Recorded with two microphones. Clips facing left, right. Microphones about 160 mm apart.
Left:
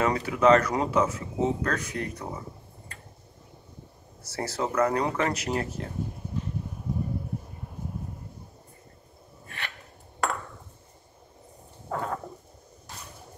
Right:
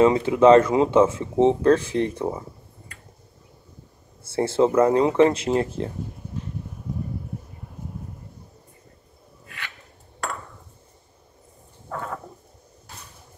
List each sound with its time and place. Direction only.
0.0 s speech: 25° right (ahead or behind)
4.3 s speech: 25° right (ahead or behind)